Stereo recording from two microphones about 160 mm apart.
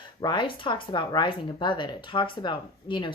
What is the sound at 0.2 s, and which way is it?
A woman's voice, 30° left (ahead or behind).